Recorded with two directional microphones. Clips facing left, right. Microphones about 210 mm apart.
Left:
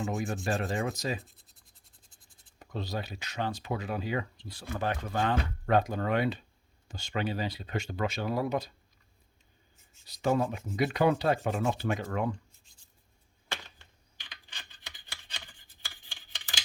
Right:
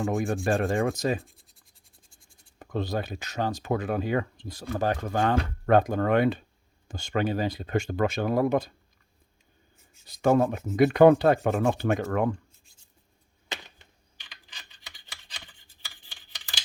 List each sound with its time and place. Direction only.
0.0 s rub: 55° right (ahead or behind)
0.4 s speech: 50° right (ahead or behind)
2.6 s speech: 50° right (ahead or behind)
10.1 s speech: 50° right (ahead or behind)
14.3 s computer keyboard: centre (ahead or behind)